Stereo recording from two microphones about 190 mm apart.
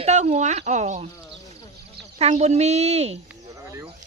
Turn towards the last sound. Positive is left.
turn(degrees=-15)  # may be behind; listen again after turning